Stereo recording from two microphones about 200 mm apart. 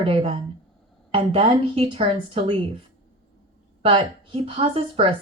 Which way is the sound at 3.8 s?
30° right (ahead or behind).